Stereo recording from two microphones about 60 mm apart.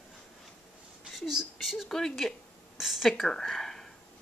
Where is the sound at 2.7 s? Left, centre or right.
Centre.